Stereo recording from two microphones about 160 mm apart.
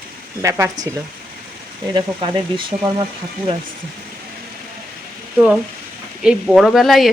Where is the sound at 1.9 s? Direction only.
30° right (ahead or behind).